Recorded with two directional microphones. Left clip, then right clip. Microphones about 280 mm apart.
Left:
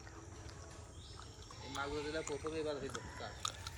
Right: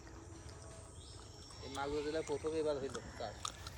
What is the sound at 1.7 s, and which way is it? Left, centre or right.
Speech, right.